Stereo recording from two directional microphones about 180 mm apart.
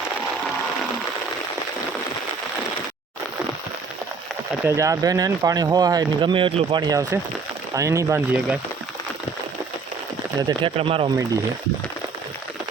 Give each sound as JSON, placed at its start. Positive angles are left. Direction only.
{"t": 4.6, "sound": "speech", "side_deg": -15}
{"t": 10.6, "sound": "speech", "side_deg": -30}